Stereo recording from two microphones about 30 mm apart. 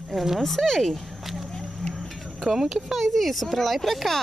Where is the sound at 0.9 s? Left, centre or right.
Centre.